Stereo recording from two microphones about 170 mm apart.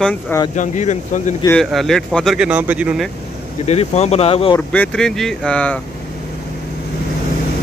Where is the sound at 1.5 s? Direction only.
Centre (ahead or behind).